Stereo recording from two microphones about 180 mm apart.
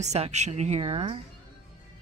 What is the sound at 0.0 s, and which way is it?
Speech, 40° right (ahead or behind).